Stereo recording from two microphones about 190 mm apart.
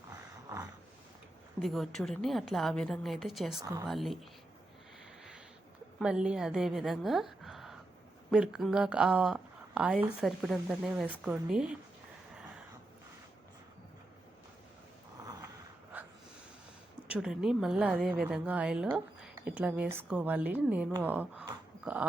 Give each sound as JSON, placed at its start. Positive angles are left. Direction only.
{"t": 1.5, "sound": "speech", "side_deg": 0}
{"t": 6.0, "sound": "a woman's voice", "side_deg": -5}
{"t": 15.2, "sound": "a sound", "side_deg": -15}
{"t": 17.1, "sound": "a woman's voice", "side_deg": -5}